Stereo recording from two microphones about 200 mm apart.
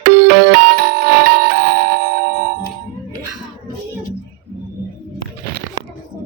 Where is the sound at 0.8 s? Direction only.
50° right (ahead or behind).